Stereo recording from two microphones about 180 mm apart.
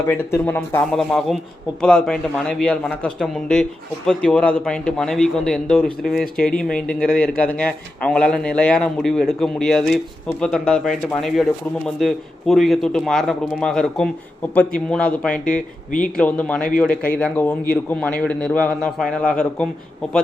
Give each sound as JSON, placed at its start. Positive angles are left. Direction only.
{"t": 0.0, "sound": "a man's voice", "side_deg": 15}
{"t": 15.9, "sound": "speech", "side_deg": 45}
{"t": 16.1, "sound": "a man's voice", "side_deg": 5}